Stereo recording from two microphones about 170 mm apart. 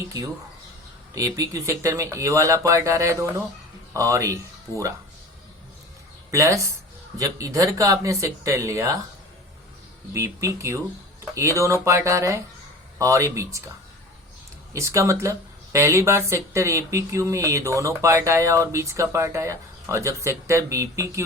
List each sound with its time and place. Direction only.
1.1 s speech: 20° right (ahead or behind)
6.3 s speech: 20° right (ahead or behind)
10.1 s speech: 15° right (ahead or behind)
14.7 s speech: 20° right (ahead or behind)